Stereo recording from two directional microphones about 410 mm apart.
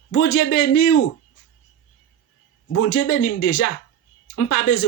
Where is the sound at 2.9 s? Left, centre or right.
Left.